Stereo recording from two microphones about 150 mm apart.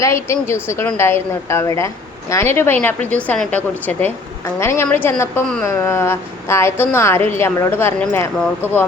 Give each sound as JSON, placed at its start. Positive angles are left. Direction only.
{"t": 0.0, "sound": "a woman's voice", "side_deg": 20}